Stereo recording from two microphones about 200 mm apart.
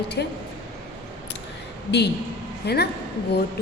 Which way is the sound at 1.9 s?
55° left (ahead or behind).